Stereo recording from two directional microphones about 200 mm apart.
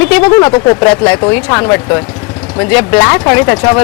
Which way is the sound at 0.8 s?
5° left (ahead or behind).